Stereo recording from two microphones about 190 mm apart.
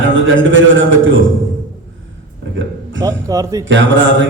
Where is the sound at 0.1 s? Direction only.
85° right.